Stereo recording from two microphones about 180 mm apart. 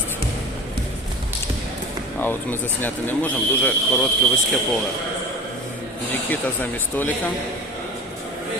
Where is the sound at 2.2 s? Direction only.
10° left (ahead or behind).